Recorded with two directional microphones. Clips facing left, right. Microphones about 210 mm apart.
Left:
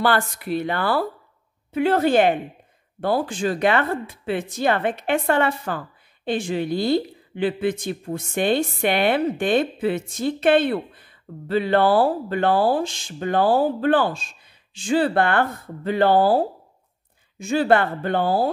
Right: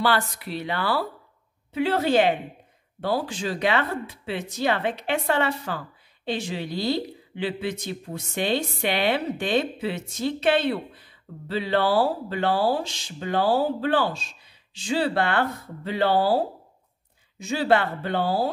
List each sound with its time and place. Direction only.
0.0 s speech: 50° left (ahead or behind)